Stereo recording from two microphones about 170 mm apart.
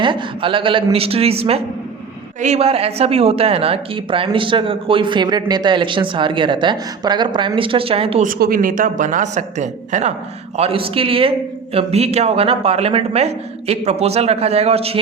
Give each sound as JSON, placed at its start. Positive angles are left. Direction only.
{"t": 0.0, "sound": "a man's voice", "side_deg": -30}
{"t": 8.2, "sound": "a man's voice", "side_deg": -55}